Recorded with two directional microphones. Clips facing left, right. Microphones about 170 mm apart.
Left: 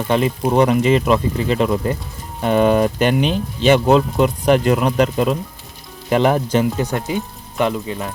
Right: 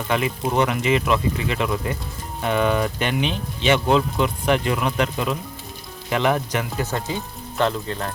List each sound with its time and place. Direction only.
0.1 s speech: 35° left (ahead or behind)
6.8 s speech: 15° left (ahead or behind)